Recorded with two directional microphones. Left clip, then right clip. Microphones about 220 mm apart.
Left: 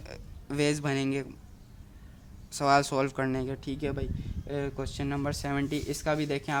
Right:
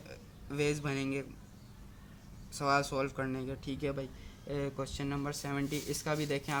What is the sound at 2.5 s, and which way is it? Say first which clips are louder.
Speech: left 6 dB; 40° left (ahead or behind).